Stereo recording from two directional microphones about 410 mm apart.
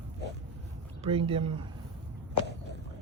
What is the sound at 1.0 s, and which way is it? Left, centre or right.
Speech, centre.